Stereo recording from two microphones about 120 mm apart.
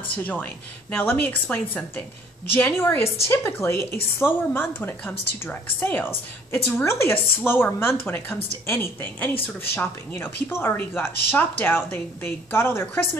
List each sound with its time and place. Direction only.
0.1 s a woman's voice: 15° left (ahead or behind)